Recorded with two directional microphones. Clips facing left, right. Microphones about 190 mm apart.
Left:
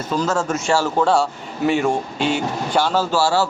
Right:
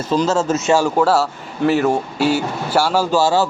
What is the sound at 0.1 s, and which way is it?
Speech, 25° right (ahead or behind).